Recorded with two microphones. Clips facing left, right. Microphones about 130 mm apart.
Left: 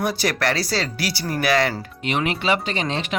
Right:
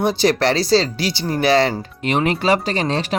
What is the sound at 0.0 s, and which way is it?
Speech, 25° right (ahead or behind).